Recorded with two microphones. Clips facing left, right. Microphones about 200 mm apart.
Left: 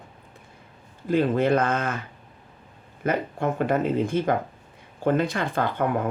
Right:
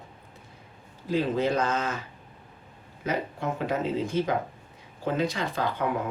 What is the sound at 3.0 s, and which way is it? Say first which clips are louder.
Speech: left 5 dB; 55° left (ahead or behind).